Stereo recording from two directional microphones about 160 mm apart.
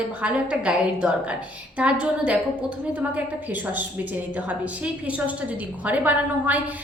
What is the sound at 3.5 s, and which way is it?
A woman's voice, 10° right (ahead or behind).